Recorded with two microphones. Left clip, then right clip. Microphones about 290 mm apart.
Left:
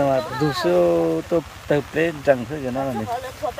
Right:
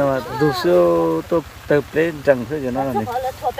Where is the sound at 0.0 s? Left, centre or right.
Centre.